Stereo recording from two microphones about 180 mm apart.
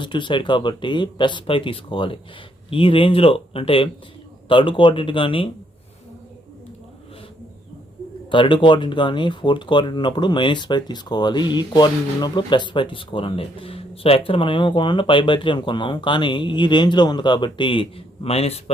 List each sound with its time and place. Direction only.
0.0 s speech: 25° left (ahead or behind)
8.3 s speech: 25° left (ahead or behind)